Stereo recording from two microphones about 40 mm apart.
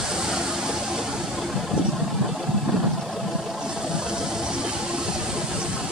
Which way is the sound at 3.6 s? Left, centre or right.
Centre.